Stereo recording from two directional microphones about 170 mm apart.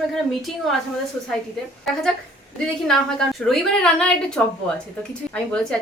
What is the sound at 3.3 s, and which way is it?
Speech, 5° left (ahead or behind).